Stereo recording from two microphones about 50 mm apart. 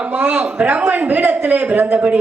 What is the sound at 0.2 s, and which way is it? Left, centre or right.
A man's voice, right.